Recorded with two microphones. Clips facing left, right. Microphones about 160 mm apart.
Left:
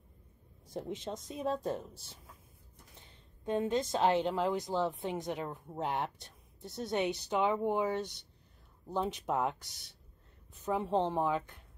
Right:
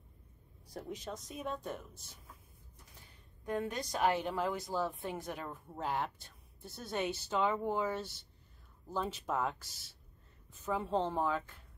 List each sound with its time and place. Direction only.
0.7 s a woman's voice: 25° left (ahead or behind)
3.4 s a woman's voice: 20° left (ahead or behind)